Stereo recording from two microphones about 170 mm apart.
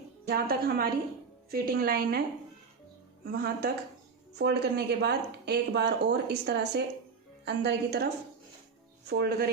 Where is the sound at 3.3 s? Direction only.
70° right (ahead or behind).